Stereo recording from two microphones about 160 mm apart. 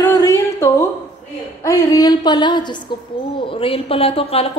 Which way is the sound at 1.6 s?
20° left (ahead or behind).